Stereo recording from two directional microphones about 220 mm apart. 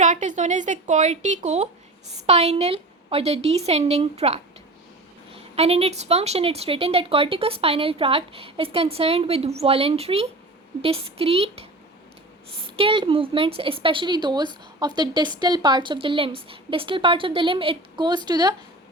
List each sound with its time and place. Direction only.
0.0 s speech: 35° right (ahead or behind)
5.5 s speech: 30° right (ahead or behind)
12.7 s speech: 25° right (ahead or behind)